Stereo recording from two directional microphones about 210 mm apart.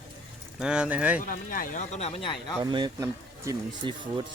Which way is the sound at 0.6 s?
5° right (ahead or behind).